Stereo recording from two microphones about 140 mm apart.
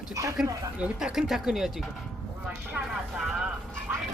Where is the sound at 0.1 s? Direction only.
25° right (ahead or behind).